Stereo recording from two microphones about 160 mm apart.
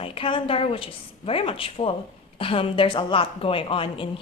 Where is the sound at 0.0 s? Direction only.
35° left (ahead or behind).